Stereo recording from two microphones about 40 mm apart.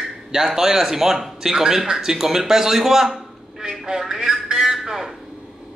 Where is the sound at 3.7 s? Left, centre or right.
Centre.